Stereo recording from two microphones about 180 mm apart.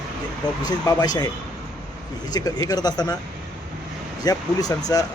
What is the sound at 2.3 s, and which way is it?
Speech, 20° left (ahead or behind).